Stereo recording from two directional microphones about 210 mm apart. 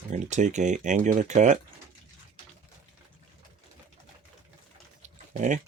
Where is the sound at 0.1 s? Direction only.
35° right (ahead or behind).